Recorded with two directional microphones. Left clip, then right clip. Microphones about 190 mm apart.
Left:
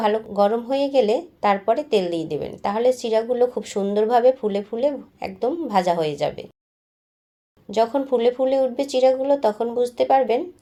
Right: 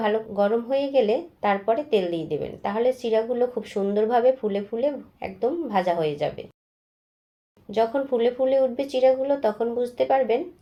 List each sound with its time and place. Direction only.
0.0 s speech: 30° left (ahead or behind)
7.7 s speech: 30° left (ahead or behind)